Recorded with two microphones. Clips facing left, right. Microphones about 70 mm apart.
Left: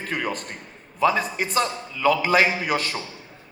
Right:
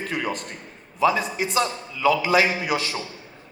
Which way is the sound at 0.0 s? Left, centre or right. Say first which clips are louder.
Even; left.